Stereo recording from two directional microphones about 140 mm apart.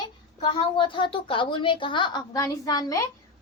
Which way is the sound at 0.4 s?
35° left (ahead or behind).